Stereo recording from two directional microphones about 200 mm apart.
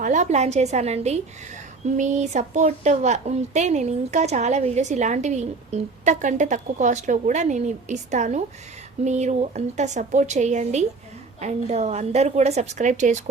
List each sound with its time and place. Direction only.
0.0 s a woman's voice: 40° right (ahead or behind)